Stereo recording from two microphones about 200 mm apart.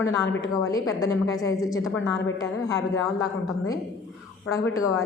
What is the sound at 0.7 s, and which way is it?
A woman's voice, 15° left (ahead or behind).